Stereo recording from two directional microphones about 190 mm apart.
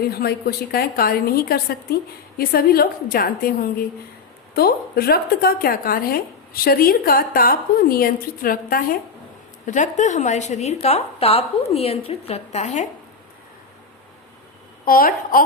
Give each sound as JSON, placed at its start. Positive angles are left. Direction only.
{"t": 0.1, "sound": "a woman's voice", "side_deg": 55}
{"t": 14.8, "sound": "a woman's voice", "side_deg": 50}